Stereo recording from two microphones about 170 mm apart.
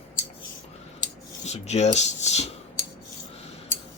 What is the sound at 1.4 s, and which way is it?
Speech, 40° left (ahead or behind).